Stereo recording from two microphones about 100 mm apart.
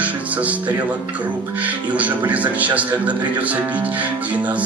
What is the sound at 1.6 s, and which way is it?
Speech, 15° right (ahead or behind).